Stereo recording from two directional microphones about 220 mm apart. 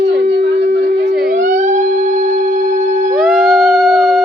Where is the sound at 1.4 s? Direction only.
35° right (ahead or behind).